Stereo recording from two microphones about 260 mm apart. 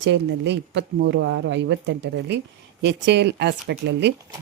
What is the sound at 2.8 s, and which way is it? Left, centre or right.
Speech, right.